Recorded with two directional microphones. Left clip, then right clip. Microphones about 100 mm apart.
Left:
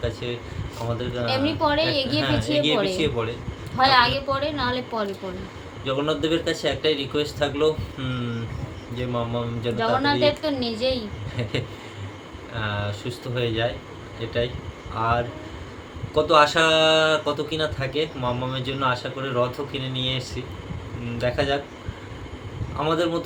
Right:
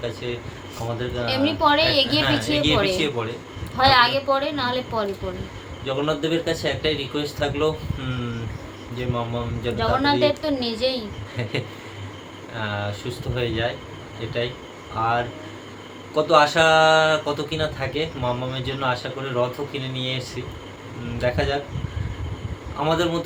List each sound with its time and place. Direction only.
1.2 s a woman's voice: 25° right (ahead or behind)
2.5 s speech: 25° left (ahead or behind)
3.8 s a woman's voice: 25° right (ahead or behind)
5.8 s speech: 25° left (ahead or behind)
9.0 s speech: 25° left (ahead or behind)
9.7 s a woman's voice: 25° right (ahead or behind)
12.6 s speech: 25° left (ahead or behind)
15.0 s speech: 25° left (ahead or behind)
16.1 s speech: 30° left (ahead or behind)
22.8 s speech: 25° left (ahead or behind)